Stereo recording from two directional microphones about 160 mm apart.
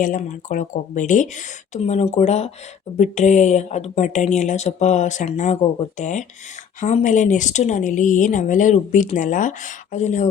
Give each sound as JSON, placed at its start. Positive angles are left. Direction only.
{"t": 0.0, "sound": "speech", "side_deg": 55}